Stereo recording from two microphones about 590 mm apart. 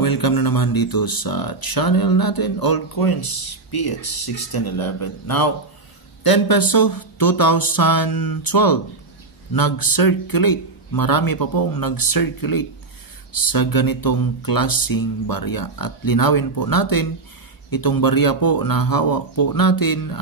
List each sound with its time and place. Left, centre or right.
0.0 s speech: left